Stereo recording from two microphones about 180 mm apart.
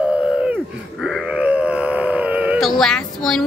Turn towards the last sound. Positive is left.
turn(degrees=0)  # may be behind; listen again after turning